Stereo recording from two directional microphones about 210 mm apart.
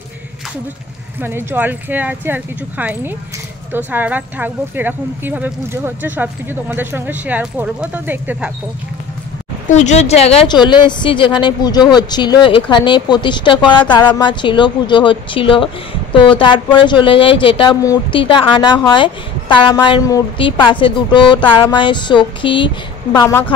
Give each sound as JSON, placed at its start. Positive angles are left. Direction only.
{"t": 1.2, "sound": "speech", "side_deg": -10}
{"t": 9.7, "sound": "a woman's voice", "side_deg": 35}
{"t": 23.1, "sound": "a woman's voice", "side_deg": 10}